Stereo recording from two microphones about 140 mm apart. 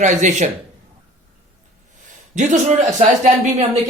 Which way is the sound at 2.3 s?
60° right (ahead or behind).